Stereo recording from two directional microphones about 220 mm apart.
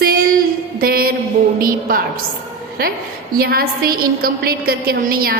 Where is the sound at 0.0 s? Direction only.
40° right (ahead or behind).